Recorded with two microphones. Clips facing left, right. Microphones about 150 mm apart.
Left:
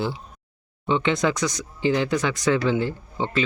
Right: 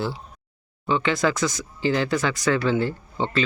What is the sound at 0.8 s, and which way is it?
Speech, 20° left (ahead or behind).